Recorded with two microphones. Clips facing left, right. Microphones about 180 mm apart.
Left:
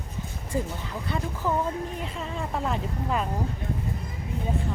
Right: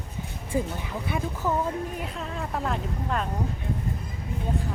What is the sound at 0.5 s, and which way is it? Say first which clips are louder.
Speech: right 2 dB; 15° right (ahead or behind).